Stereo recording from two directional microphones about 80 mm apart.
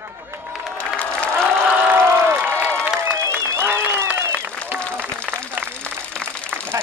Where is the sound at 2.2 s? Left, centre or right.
Right.